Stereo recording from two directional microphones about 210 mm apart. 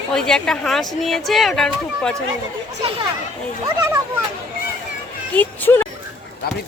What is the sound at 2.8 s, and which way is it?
Speech, 25° right (ahead or behind).